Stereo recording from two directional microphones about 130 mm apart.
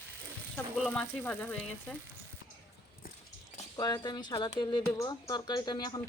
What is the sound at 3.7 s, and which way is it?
Speech, 30° left (ahead or behind).